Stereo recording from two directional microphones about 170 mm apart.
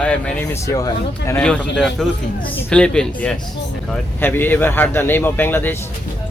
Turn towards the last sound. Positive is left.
turn(degrees=10)  # may be behind; listen again after turning